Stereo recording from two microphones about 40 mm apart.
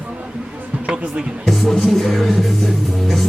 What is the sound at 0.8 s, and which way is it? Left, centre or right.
Speech, right.